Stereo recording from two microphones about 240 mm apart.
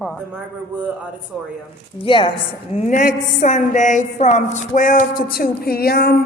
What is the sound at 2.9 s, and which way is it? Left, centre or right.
A woman's voice, left.